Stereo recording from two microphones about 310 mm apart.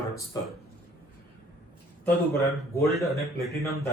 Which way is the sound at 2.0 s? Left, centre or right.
Centre.